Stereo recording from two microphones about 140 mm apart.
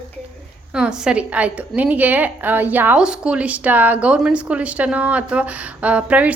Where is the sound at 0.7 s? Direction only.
5° right (ahead or behind).